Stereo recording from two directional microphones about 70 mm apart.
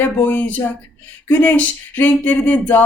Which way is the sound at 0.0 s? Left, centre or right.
Left.